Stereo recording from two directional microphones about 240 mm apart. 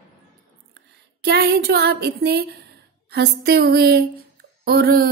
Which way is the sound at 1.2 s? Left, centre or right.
Right.